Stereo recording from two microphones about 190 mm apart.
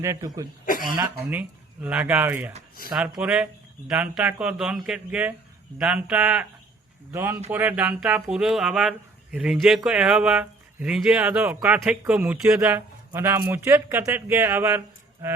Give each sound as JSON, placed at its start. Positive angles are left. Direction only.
{"t": 0.0, "sound": "speech", "side_deg": -15}
{"t": 0.6, "sound": "throat clearing", "side_deg": 45}
{"t": 1.3, "sound": "speech", "side_deg": -10}